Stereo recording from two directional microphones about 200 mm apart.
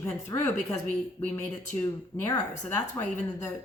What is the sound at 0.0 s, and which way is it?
Speech, 15° left (ahead or behind).